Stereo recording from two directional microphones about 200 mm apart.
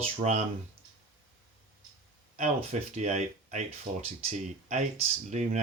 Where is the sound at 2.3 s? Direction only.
35° right (ahead or behind).